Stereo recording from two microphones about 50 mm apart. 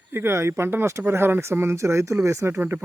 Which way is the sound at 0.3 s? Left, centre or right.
Right.